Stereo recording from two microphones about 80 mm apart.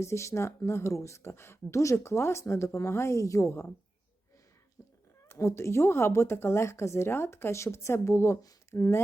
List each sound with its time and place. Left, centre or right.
0.0 s speech: left
4.8 s a sound: left
5.3 s speech: left